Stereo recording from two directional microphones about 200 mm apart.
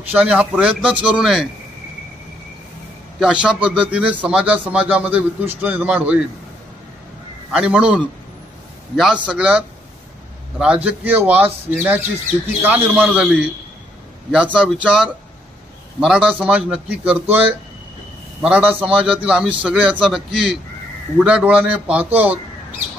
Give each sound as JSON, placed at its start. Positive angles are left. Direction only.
{"t": 0.1, "sound": "a man's voice", "side_deg": -5}
{"t": 3.2, "sound": "a man's voice", "side_deg": -5}
{"t": 7.5, "sound": "a man's voice", "side_deg": -5}
{"t": 14.6, "sound": "a man's voice", "side_deg": -5}